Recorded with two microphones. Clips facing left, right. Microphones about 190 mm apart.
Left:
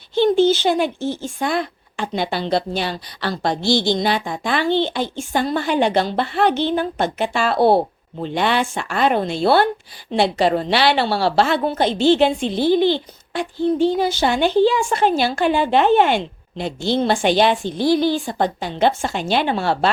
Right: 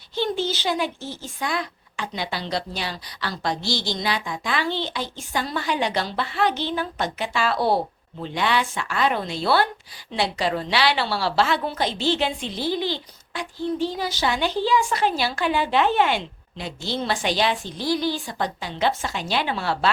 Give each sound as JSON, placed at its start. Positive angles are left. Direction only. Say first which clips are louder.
{"t": 0.4, "sound": "a woman's voice", "louder": "left 8 dB", "side_deg": 50}
{"t": 1.0, "sound": "a woman's voice", "louder": "left 11 dB", "side_deg": 25}
{"t": 1.4, "sound": "a woman's voice", "louder": "left 3 dB", "side_deg": 55}
{"t": 17.8, "sound": "a woman's voice", "louder": "left 7 dB", "side_deg": 25}
{"t": 18.6, "sound": "a woman's voice", "louder": "left 4 dB", "side_deg": 55}